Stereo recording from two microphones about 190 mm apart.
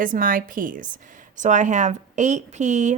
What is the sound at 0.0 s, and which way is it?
A woman's voice, 45° right (ahead or behind).